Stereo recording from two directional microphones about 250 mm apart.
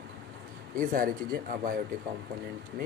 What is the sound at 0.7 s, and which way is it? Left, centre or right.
Speech, right.